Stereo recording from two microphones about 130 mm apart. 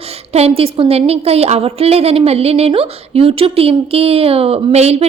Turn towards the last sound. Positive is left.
turn(degrees=-55)  # may be behind; listen again after turning